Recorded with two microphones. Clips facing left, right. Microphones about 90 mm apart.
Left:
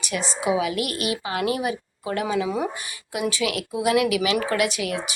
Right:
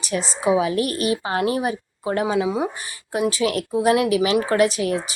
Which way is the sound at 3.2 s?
35° right (ahead or behind).